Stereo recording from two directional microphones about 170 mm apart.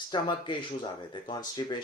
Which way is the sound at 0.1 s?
30° left (ahead or behind).